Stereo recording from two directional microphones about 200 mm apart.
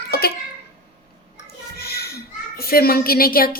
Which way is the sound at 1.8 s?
50° left (ahead or behind).